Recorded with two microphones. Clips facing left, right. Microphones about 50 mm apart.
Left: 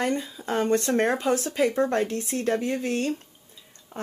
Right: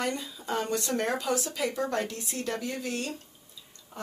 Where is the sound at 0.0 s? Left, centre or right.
Left.